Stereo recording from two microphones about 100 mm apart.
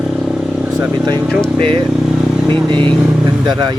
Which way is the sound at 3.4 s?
45° right (ahead or behind).